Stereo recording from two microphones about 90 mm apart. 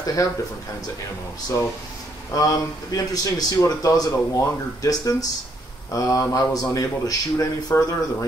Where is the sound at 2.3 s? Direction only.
40° left (ahead or behind).